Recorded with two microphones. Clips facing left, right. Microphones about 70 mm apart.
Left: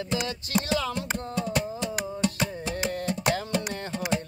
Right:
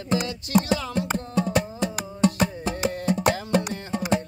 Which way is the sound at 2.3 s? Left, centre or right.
Right.